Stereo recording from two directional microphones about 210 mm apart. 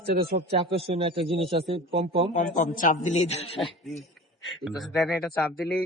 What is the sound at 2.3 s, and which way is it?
A man's voice, 40° left (ahead or behind).